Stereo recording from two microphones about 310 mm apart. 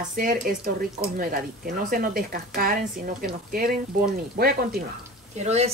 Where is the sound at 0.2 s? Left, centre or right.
Right.